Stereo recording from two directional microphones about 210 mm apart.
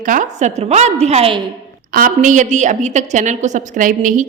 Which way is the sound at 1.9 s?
40° right (ahead or behind).